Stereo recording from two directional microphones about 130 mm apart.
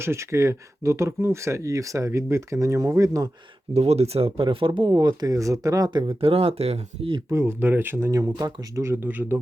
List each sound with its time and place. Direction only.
0.0 s speech: 20° right (ahead or behind)
3.8 s speech: 55° right (ahead or behind)
4.9 s speech: 30° right (ahead or behind); by 7.2 s 50° right (ahead or behind)
7.3 s speech: 20° right (ahead or behind)
8.7 s speech: 20° right (ahead or behind)